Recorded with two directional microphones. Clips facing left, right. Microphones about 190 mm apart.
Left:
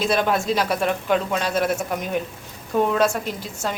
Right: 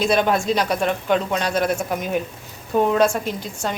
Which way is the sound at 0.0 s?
Centre (ahead or behind).